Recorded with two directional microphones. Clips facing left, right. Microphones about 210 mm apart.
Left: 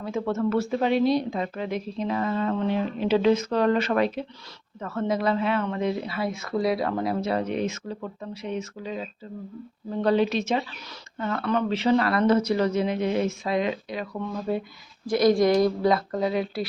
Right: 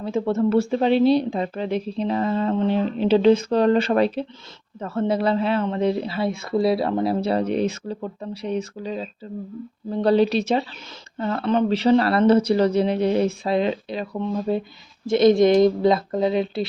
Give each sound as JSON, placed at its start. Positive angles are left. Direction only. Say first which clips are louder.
{"t": 0.0, "sound": "speech", "louder": "right 5 dB", "side_deg": -30}